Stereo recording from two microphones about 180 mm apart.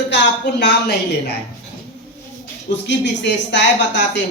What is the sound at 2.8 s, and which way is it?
Speech, 75° left (ahead or behind).